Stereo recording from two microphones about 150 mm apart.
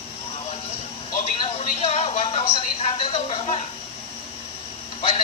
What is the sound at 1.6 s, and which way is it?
Speech, 40° left (ahead or behind).